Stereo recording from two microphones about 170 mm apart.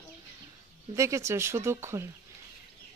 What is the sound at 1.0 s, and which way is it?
Speech, 15° right (ahead or behind).